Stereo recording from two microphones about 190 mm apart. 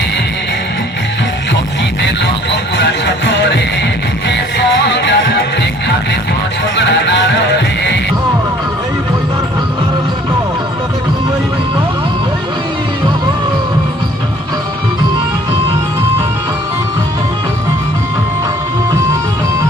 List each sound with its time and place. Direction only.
2.0 s music: 65° left (ahead or behind)
6.7 s music: 65° left (ahead or behind)